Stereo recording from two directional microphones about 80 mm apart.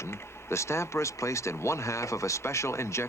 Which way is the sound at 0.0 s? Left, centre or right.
Left.